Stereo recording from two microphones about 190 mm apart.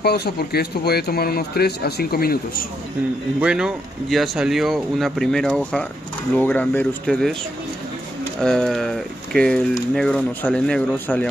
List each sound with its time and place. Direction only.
0.0 s speech: 55° left (ahead or behind)
3.3 s speech: 5° right (ahead or behind)
8.4 s speech: 5° left (ahead or behind)